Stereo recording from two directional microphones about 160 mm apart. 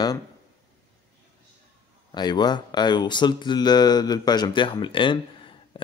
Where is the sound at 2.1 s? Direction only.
25° left (ahead or behind).